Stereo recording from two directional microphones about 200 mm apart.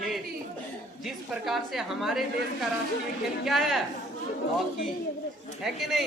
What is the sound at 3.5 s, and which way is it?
Speech, centre (ahead or behind).